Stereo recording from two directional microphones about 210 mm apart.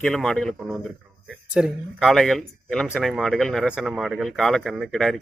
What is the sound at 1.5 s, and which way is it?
Speech, centre (ahead or behind).